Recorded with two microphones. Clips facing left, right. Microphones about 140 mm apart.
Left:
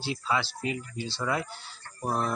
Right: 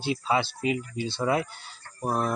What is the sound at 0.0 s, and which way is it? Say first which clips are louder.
Speech: right 4 dB; 20° right (ahead or behind).